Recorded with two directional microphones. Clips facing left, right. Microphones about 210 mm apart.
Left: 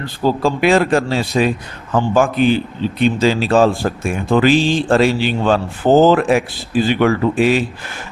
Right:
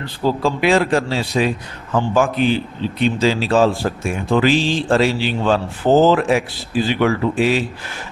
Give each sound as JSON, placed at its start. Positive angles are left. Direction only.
{"t": 0.0, "sound": "speech", "side_deg": 45}